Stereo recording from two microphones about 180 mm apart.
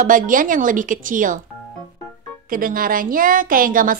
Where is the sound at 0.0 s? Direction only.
50° right (ahead or behind).